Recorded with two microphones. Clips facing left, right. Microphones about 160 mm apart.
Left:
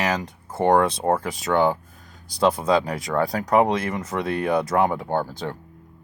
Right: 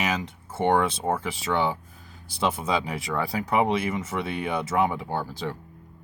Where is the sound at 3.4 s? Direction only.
40° left (ahead or behind); by 5.0 s 60° left (ahead or behind).